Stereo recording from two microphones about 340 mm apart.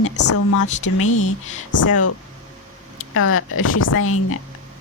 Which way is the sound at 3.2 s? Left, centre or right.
Left.